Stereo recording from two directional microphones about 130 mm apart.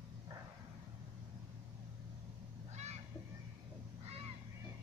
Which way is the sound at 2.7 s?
60° right (ahead or behind).